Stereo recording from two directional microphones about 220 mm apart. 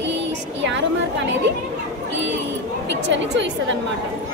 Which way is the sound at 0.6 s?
55° right (ahead or behind).